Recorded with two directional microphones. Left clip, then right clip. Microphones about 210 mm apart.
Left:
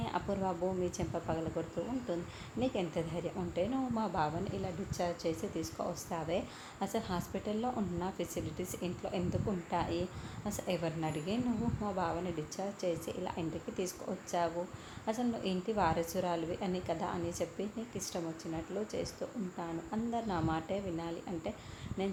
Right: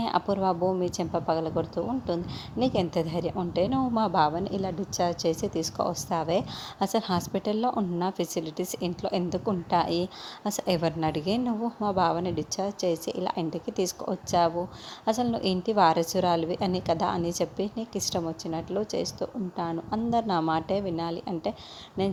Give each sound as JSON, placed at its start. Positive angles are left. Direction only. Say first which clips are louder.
{"t": 0.0, "sound": "a woman's voice", "louder": "right 10 dB", "side_deg": -40}